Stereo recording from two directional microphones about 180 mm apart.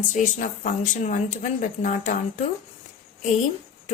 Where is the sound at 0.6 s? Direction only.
45° left (ahead or behind).